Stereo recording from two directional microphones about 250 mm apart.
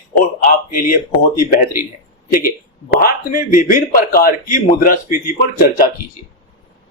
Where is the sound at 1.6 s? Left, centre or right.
Centre.